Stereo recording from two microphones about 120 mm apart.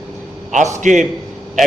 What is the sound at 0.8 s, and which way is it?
Speech, 90° right.